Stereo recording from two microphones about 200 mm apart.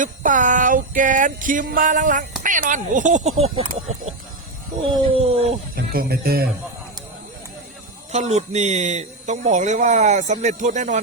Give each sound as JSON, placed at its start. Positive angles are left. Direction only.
{"t": 0.0, "sound": "speech", "side_deg": -40}
{"t": 4.9, "sound": "speech", "side_deg": -30}
{"t": 5.7, "sound": "speech", "side_deg": -50}
{"t": 8.1, "sound": "speech", "side_deg": -35}